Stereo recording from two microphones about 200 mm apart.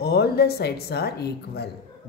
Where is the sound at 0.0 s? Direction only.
55° left (ahead or behind).